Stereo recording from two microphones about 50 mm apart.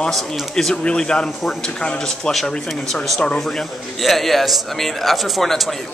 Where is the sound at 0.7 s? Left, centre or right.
Left.